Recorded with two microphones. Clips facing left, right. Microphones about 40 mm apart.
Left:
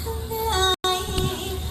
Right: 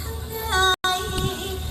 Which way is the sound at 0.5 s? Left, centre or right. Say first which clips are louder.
Right 3 dB; centre.